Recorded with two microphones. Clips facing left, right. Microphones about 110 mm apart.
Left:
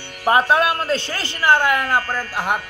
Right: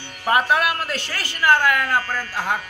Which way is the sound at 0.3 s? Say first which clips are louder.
Left 3 dB; 25° left (ahead or behind).